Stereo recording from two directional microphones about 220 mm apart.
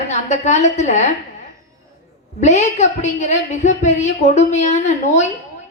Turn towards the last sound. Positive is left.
turn(degrees=35)  # may be behind; listen again after turning